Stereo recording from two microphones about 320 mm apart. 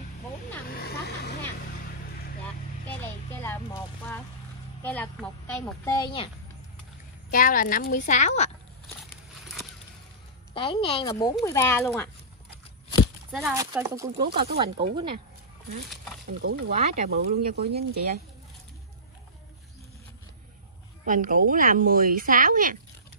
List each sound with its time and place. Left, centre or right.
0.7 s vehicle: left
2.9 s a sound: centre
4.8 s a woman's voice: centre
7.2 s a woman's voice: left
10.5 s speech: centre
13.3 s speech: centre
14.3 s speech: right
14.8 s speech: centre
16.4 s speech: right
21.0 s speech: right